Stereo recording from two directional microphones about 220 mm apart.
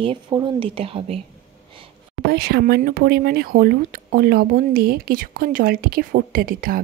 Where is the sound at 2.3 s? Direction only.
45° right (ahead or behind).